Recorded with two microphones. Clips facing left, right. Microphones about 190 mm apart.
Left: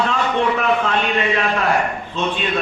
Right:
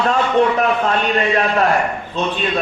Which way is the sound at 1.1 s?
40° right (ahead or behind).